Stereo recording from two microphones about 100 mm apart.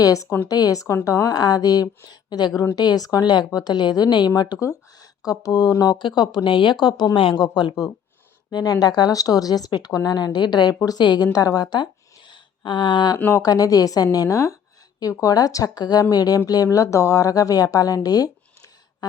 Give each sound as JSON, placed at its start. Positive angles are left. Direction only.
{"t": 0.0, "sound": "speech", "side_deg": 35}
{"t": 8.4, "sound": "speech", "side_deg": 40}
{"t": 12.3, "sound": "a sound", "side_deg": 55}
{"t": 13.1, "sound": "speech", "side_deg": 25}
{"t": 13.4, "sound": "speech", "side_deg": 40}